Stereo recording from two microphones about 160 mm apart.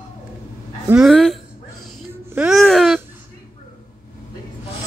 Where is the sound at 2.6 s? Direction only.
5° left (ahead or behind).